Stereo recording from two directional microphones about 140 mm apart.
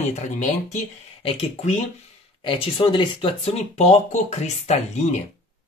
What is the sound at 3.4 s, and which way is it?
Speech, 50° left (ahead or behind).